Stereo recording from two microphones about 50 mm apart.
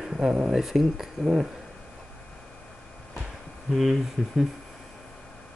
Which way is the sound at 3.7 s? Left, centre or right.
Centre.